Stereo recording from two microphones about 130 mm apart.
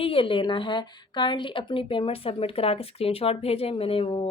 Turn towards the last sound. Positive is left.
turn(degrees=45)  # may be behind; listen again after turning